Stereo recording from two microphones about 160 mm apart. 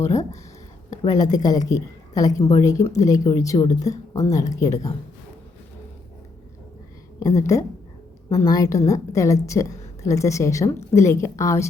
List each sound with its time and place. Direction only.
0.0 s a woman's voice: 20° left (ahead or behind)
7.2 s a woman's voice: 20° left (ahead or behind)